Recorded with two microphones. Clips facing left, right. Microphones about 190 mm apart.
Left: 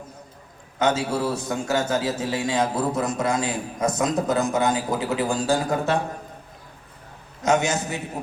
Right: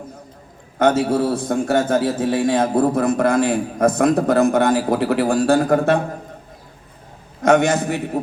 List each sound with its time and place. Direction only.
0.8 s a man's voice: 55° right (ahead or behind)
7.4 s a man's voice: 60° right (ahead or behind)